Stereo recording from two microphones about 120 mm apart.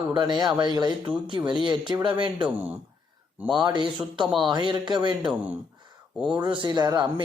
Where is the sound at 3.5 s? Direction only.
40° right (ahead or behind).